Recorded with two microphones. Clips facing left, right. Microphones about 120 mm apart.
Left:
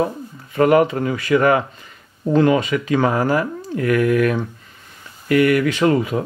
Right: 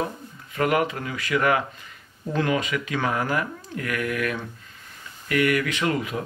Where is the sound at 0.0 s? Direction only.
35° left (ahead or behind).